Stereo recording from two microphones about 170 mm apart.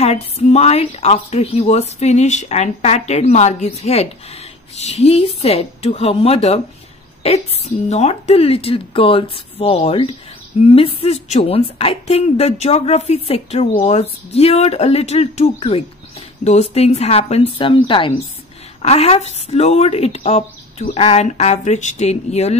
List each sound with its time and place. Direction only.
0.0 s speech: 40° left (ahead or behind)